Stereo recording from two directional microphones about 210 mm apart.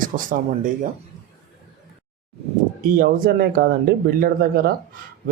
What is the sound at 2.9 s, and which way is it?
Speech, 45° right (ahead or behind).